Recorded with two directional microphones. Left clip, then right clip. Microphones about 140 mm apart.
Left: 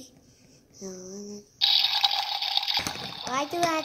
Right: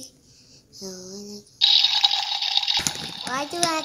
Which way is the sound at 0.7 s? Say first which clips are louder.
Right 3 dB; 45° right (ahead or behind).